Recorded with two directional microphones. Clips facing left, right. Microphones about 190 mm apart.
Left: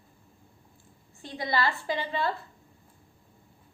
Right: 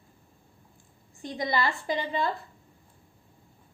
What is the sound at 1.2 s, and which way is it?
A woman's voice, 15° right (ahead or behind).